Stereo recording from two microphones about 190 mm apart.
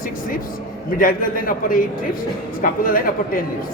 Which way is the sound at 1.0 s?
50° left (ahead or behind).